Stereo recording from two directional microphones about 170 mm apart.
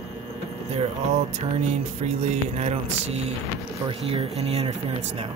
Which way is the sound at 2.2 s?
40° right (ahead or behind).